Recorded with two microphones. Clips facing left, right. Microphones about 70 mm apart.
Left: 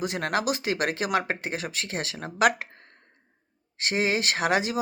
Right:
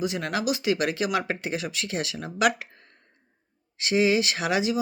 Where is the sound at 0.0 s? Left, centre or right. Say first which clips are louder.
Even; left.